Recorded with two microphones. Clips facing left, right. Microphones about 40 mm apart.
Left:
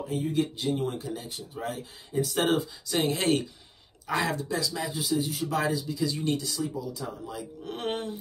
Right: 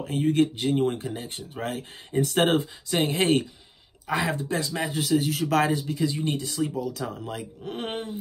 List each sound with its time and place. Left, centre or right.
0.0 s speech: right
2.9 s speech: right
5.7 s speech: right
6.0 s speech: right
6.5 s speech: right
7.6 s speech: centre